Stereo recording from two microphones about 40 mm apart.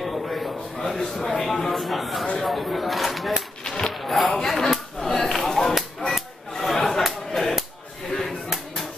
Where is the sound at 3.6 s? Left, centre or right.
Centre.